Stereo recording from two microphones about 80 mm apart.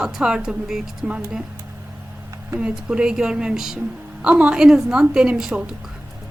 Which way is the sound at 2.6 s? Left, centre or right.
Centre.